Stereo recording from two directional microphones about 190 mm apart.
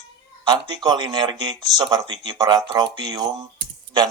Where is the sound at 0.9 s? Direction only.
20° right (ahead or behind).